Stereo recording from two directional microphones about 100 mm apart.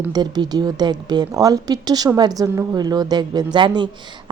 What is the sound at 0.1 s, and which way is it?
A woman's voice, 40° right (ahead or behind).